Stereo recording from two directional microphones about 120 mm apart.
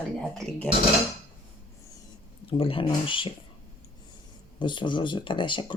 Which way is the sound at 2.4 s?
50° left (ahead or behind).